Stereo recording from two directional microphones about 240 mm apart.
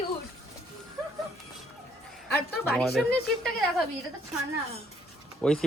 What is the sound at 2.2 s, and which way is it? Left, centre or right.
Speech, centre.